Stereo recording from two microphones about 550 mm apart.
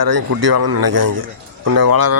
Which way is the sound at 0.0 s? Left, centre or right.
Right.